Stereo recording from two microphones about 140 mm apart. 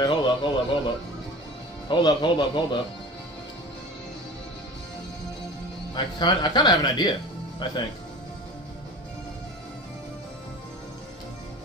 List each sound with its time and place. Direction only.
0.0 s speech: 35° left (ahead or behind)
5.9 s speech: 30° left (ahead or behind)